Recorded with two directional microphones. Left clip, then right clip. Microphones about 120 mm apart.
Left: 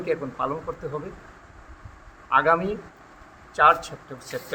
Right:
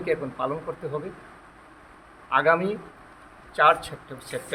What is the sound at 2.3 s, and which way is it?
A man's voice, 10° right (ahead or behind).